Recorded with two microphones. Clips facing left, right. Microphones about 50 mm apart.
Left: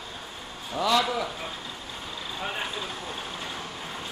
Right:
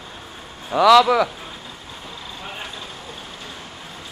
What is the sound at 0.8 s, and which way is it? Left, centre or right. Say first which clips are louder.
Speech: right 12 dB; right.